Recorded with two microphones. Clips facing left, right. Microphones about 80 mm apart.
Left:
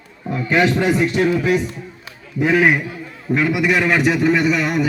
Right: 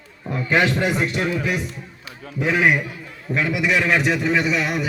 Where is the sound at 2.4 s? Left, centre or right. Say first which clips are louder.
Left 3 dB; centre.